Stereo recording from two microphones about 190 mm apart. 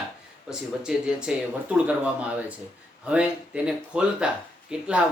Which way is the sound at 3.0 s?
5° right (ahead or behind).